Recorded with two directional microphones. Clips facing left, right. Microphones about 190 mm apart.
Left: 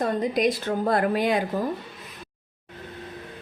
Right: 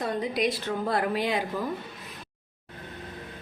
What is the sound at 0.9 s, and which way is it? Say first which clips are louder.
Speech: left 5 dB; 50° left (ahead or behind).